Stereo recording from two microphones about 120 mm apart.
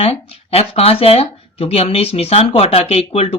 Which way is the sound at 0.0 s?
55° left (ahead or behind).